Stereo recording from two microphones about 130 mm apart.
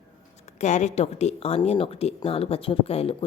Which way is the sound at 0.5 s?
65° left (ahead or behind).